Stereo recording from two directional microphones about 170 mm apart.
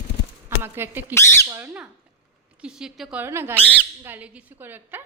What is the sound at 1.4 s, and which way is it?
Speech, 15° right (ahead or behind).